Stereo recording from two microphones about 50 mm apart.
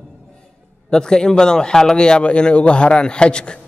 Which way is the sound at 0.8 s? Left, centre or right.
Centre.